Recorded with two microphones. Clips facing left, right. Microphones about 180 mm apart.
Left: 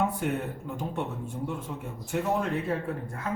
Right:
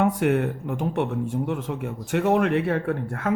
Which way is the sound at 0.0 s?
80° right.